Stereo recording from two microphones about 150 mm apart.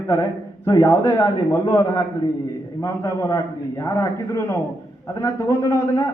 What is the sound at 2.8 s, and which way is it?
A man's voice, 20° left (ahead or behind).